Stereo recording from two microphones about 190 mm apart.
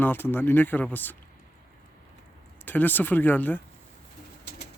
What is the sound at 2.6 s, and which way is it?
Speech, 10° left (ahead or behind).